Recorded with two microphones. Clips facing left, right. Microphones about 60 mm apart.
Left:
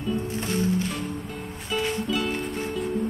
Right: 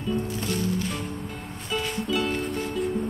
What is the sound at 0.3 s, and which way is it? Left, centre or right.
Music, left.